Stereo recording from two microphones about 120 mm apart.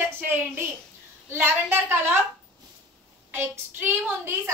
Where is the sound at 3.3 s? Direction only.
20° right (ahead or behind).